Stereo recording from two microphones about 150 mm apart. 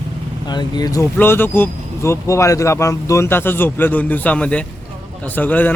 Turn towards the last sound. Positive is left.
turn(degrees=10)  # may be behind; listen again after turning